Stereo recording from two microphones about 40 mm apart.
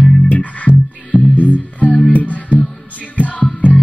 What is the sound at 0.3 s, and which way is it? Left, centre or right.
Music, left.